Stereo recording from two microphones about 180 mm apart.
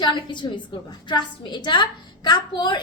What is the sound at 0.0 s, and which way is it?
A woman's voice, 25° left (ahead or behind).